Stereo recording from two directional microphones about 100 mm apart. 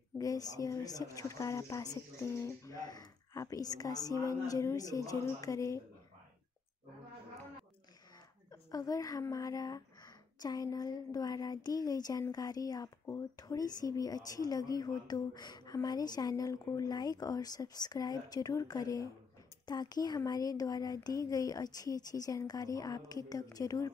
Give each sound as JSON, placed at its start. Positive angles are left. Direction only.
{"t": 0.2, "sound": "speech", "side_deg": 35}
{"t": 8.5, "sound": "a woman's voice", "side_deg": 35}